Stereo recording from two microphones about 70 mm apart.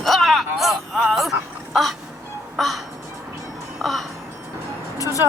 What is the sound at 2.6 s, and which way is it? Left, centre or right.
Music, centre.